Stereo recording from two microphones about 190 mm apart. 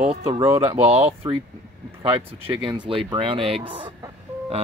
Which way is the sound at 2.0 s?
25° right (ahead or behind).